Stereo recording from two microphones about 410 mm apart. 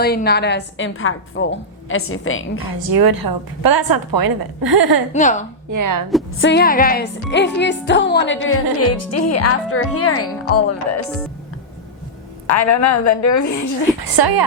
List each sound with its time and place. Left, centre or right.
0.0 s speech: left
2.9 s a woman's voice: right
5.1 s a woman's voice: centre
5.7 s speech: right
6.4 s speech: left
12.6 s a woman's voice: left
14.0 s a woman's voice: right